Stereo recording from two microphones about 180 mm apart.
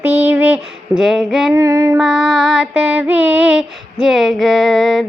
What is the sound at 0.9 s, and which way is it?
Female singing, centre (ahead or behind).